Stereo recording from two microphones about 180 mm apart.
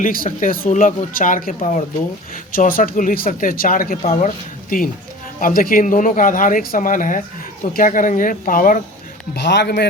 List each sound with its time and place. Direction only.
0.0 s speech: 50° left (ahead or behind)
4.0 s speech: 40° left (ahead or behind)
4.7 s speech: 50° left (ahead or behind)
9.3 s a man's voice: 75° left (ahead or behind)